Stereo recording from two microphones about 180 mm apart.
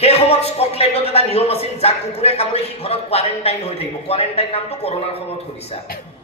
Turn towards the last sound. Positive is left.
turn(degrees=35)  # may be behind; listen again after turning